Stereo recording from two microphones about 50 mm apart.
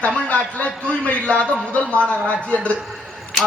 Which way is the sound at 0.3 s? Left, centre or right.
Left.